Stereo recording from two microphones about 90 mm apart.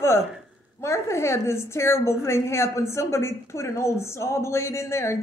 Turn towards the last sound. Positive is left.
turn(degrees=30)  # may be behind; listen again after turning